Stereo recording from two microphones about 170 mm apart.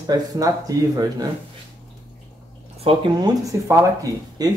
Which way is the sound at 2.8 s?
35° right (ahead or behind).